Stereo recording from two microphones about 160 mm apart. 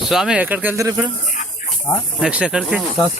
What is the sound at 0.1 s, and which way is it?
Speech, 5° right (ahead or behind).